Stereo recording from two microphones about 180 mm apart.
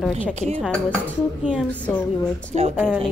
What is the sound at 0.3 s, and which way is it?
Speech, 40° right (ahead or behind).